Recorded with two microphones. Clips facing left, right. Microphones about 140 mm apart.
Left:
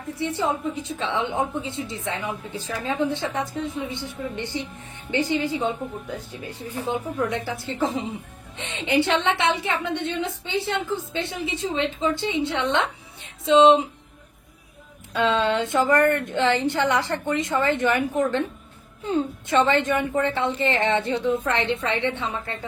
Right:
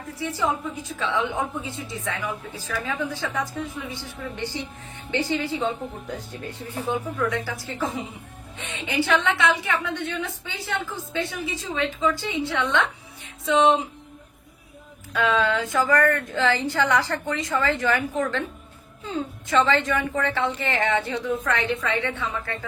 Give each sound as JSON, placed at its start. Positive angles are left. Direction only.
{"t": 0.2, "sound": "a woman's voice", "side_deg": 25}
{"t": 6.9, "sound": "a woman's voice", "side_deg": 20}
{"t": 15.1, "sound": "a woman's voice", "side_deg": 25}